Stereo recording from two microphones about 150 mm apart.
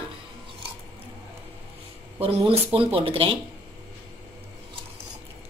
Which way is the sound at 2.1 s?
35° right (ahead or behind).